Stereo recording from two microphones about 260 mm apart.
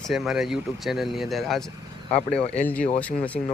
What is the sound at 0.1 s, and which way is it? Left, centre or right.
Speech, centre.